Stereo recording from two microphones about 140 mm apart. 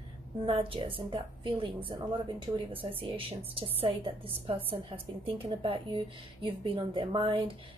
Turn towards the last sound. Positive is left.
turn(degrees=-40)  # may be behind; listen again after turning